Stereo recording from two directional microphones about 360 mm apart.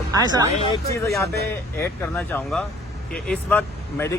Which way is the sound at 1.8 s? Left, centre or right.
Centre.